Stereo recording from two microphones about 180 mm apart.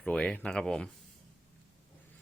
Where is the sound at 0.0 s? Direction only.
5° left (ahead or behind).